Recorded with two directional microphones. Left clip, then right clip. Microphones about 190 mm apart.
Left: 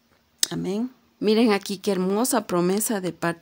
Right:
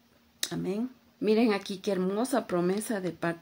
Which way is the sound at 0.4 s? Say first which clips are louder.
Left 6 dB; 45° left (ahead or behind).